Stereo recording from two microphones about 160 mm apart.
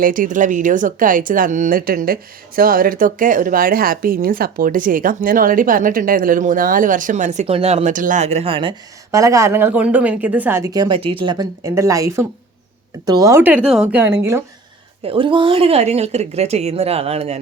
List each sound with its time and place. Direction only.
0.0 s speech: 60° right (ahead or behind); by 8.7 s 35° right (ahead or behind)
9.1 s a woman's voice: 20° right (ahead or behind)
15.0 s a woman's voice: 35° right (ahead or behind)